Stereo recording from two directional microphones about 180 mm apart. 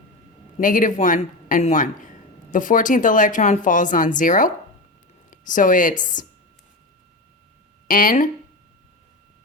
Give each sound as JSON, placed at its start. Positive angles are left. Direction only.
{"t": 0.6, "sound": "speech", "side_deg": 50}
{"t": 7.9, "sound": "speech", "side_deg": 50}